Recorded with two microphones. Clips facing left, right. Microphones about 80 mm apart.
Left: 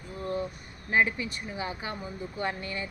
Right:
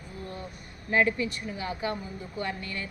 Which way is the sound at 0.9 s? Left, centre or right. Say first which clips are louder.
Right 1 dB; centre.